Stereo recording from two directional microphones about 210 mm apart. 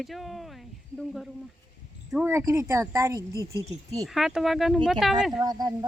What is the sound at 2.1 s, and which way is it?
Speech, 10° right (ahead or behind).